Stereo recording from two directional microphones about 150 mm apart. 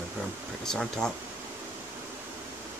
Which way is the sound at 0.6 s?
5° left (ahead or behind).